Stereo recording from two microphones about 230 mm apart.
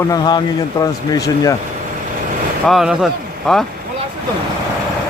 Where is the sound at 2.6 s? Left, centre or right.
Centre.